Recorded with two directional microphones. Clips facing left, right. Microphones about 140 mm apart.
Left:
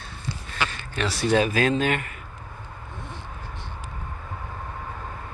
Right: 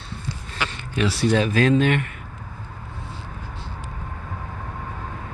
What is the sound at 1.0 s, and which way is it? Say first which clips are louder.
Speech: right 5 dB; 10° right (ahead or behind).